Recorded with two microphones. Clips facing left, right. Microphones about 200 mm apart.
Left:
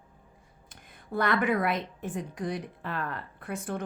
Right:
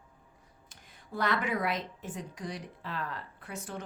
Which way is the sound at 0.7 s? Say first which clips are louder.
Left 6 dB; 55° left (ahead or behind).